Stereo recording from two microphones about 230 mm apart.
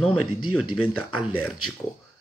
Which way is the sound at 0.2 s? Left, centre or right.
Left.